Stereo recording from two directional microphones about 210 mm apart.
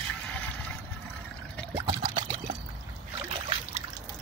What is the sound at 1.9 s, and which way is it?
Pour, 20° right (ahead or behind).